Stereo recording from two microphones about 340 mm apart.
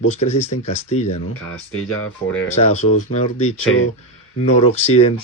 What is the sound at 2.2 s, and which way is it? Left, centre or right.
Speech, centre.